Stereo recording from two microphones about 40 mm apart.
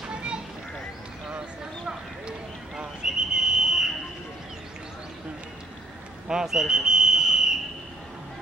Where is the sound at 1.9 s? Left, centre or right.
Centre.